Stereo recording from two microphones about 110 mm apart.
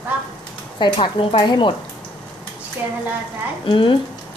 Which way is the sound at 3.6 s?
50° left (ahead or behind).